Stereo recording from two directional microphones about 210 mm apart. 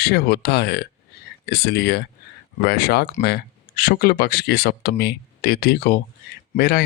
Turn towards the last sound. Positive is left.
turn(degrees=45)  # may be behind; listen again after turning